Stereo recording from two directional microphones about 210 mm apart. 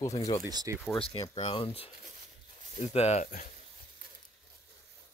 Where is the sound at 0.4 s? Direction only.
15° right (ahead or behind).